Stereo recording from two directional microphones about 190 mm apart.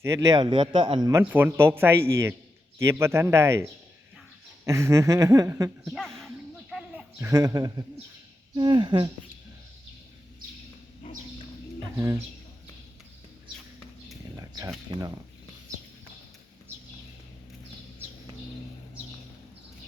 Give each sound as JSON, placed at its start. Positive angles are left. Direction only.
{"t": 0.0, "sound": "speech", "side_deg": -15}
{"t": 1.2, "sound": "speech", "side_deg": -10}
{"t": 6.1, "sound": "snake", "side_deg": 0}
{"t": 7.2, "sound": "speech", "side_deg": -15}
{"t": 11.9, "sound": "speech", "side_deg": -15}
{"t": 14.3, "sound": "a sound", "side_deg": -20}
{"t": 14.9, "sound": "speech", "side_deg": -20}